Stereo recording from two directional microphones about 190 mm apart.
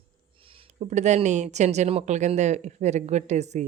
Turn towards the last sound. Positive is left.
turn(degrees=-35)  # may be behind; listen again after turning